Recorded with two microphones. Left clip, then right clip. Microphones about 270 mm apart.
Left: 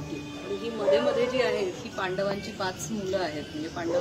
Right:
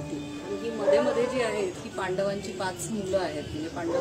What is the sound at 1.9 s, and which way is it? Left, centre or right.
A woman's voice, centre.